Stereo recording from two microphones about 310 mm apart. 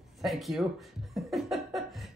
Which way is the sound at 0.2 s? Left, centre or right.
Centre.